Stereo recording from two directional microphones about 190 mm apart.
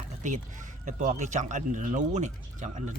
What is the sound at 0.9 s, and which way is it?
Speech, 40° right (ahead or behind).